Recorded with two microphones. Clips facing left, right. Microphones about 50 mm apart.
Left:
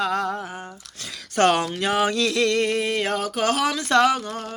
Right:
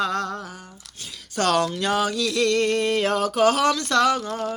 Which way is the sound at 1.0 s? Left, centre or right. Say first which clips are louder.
Left 2 dB; left.